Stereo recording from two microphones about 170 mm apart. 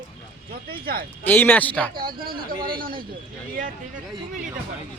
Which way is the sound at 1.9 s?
60° right (ahead or behind).